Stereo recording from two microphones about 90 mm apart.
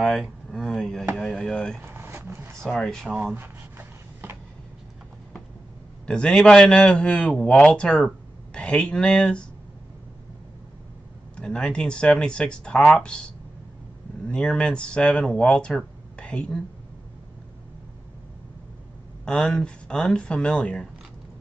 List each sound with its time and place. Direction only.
0.0 s speech: centre (ahead or behind)
1.8 s vehicle: 25° right (ahead or behind)
2.6 s speech: 5° left (ahead or behind)
3.3 s a sound: 25° right (ahead or behind)
6.0 s a man's voice: 10° left (ahead or behind)
11.3 s a man's voice: 10° left (ahead or behind)
19.2 s a man's voice: 10° left (ahead or behind)